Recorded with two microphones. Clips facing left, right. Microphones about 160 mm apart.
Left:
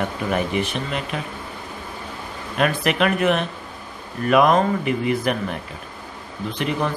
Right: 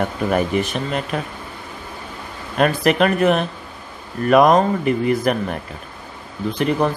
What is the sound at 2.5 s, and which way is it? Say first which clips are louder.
Speech: right 4 dB; 40° right (ahead or behind).